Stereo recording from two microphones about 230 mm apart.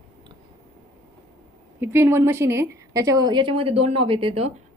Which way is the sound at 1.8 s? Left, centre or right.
Centre.